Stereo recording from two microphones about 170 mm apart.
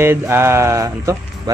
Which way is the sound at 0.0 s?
15° right (ahead or behind).